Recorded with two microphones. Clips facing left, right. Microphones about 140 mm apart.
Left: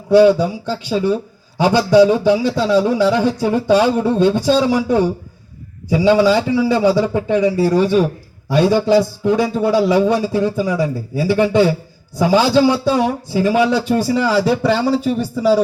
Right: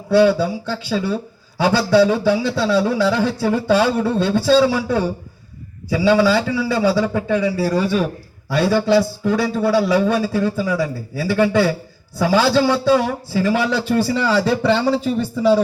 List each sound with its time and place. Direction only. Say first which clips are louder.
0.1 s a man's voice: left 4 dB; 15° left (ahead or behind)